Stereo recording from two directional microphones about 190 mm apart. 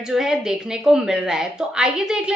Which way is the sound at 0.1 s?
Centre (ahead or behind).